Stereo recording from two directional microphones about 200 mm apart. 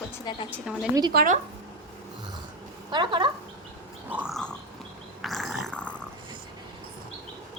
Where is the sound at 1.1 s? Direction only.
50° right (ahead or behind).